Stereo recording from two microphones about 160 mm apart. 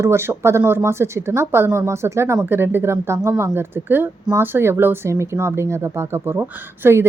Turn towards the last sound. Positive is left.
turn(degrees=-15)  # may be behind; listen again after turning